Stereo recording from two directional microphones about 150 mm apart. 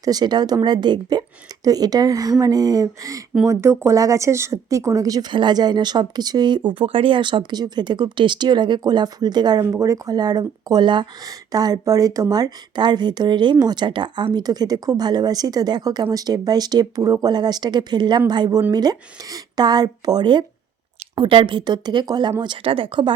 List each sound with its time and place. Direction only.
0.0 s speech: 25° right (ahead or behind)